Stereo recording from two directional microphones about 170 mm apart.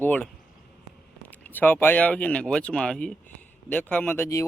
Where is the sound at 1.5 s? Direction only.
10° left (ahead or behind).